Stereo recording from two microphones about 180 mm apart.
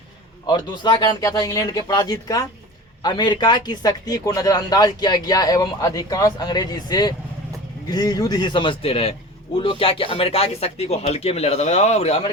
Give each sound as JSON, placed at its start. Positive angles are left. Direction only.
{"t": 0.4, "sound": "a man's voice", "side_deg": 25}